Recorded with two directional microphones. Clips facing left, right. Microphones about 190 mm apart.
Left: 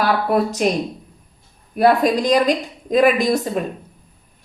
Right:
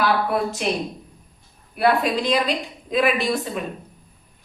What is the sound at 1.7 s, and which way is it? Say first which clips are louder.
A woman's voice: left 5 dB; 40° left (ahead or behind).